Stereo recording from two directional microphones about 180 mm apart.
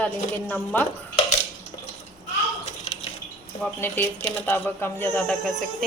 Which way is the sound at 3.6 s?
10° left (ahead or behind).